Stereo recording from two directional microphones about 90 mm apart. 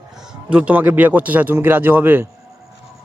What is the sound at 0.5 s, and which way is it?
Speech, 15° right (ahead or behind).